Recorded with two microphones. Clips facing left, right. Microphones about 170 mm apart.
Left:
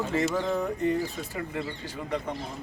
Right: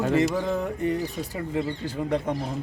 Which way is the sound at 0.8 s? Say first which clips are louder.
Even; 15° right (ahead or behind).